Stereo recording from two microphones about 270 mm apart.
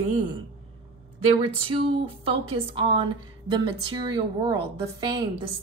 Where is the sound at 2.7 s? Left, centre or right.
Centre.